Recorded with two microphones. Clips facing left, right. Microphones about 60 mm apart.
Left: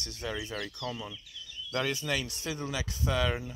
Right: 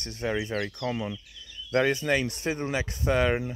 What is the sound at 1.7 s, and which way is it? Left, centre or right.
Speech, right.